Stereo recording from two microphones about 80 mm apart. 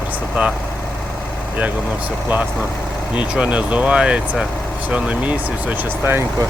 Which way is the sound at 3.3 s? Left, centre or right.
Centre.